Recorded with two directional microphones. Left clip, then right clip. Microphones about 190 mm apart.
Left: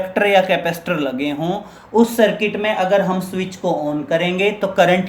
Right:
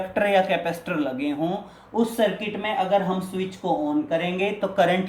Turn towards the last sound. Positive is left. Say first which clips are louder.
# left 7 dB
turn(degrees=30)  # may be behind; listen again after turning